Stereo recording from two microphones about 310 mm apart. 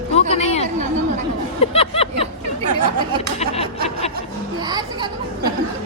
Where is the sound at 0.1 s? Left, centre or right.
Centre.